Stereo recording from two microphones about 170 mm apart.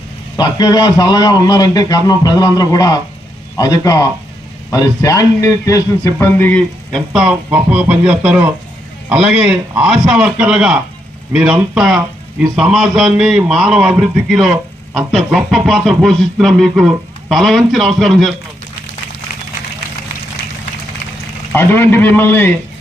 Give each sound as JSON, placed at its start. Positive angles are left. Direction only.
{"t": 0.3, "sound": "a man's voice", "side_deg": 25}
{"t": 21.5, "sound": "a man's voice", "side_deg": 15}